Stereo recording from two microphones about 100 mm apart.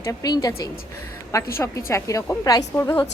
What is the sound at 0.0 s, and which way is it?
A woman's voice, 35° left (ahead or behind).